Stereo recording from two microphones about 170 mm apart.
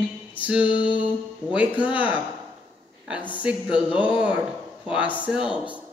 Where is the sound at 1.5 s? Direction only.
10° right (ahead or behind).